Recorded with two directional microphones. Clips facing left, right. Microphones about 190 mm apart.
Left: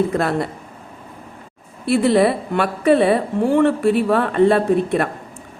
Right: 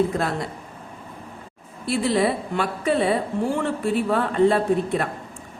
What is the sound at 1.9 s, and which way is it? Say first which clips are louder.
A woman's voice: left 6 dB; 60° left (ahead or behind).